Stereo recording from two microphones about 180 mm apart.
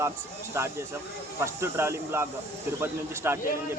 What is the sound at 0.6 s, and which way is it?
Speech, 15° right (ahead or behind).